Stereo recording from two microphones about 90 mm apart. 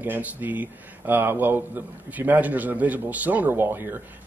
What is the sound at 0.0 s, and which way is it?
Speech, 20° right (ahead or behind).